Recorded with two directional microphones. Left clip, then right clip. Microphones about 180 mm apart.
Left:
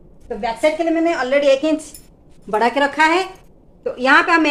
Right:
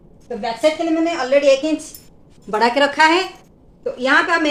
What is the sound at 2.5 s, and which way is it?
Speech, 10° left (ahead or behind).